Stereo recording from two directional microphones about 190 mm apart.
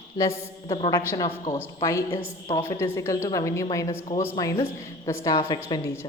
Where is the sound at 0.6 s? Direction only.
30° left (ahead or behind).